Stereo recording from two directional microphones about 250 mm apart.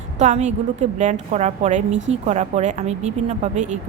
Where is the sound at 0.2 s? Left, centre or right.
Right.